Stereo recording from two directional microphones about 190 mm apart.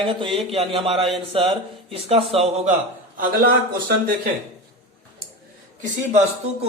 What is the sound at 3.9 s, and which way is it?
Speech, 50° right (ahead or behind).